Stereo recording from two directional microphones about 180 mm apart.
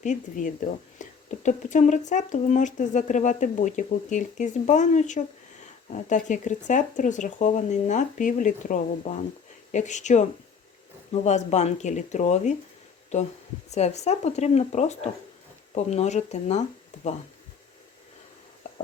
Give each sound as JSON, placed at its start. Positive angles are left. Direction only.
{"t": 0.0, "sound": "speech", "side_deg": 45}